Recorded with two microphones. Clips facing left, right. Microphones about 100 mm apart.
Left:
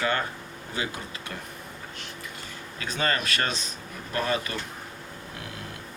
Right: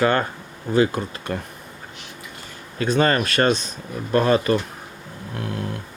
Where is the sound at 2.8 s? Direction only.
50° right (ahead or behind).